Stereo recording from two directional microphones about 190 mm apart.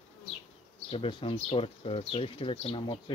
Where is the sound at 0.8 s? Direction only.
30° left (ahead or behind).